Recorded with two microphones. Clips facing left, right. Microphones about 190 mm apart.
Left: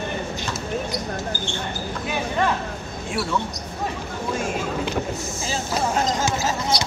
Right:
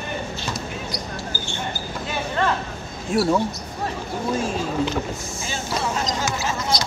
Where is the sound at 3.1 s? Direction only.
40° right (ahead or behind).